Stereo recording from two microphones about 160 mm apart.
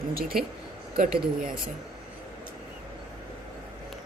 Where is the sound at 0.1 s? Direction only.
65° right (ahead or behind).